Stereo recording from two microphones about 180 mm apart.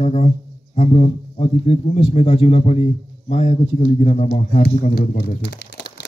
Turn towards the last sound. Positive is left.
turn(degrees=75)  # may be behind; listen again after turning